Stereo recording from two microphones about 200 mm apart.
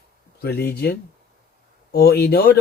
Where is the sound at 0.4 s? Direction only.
55° left (ahead or behind).